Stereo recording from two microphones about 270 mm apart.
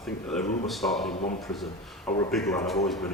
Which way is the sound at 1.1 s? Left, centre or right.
Left.